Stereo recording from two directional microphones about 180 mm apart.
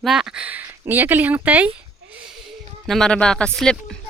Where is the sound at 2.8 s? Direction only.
5° left (ahead or behind).